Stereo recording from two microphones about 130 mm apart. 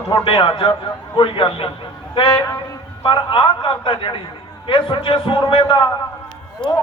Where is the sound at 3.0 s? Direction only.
40° left (ahead or behind).